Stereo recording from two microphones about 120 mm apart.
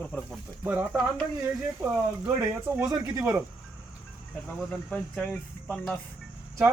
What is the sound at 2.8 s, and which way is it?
Speech, 30° right (ahead or behind).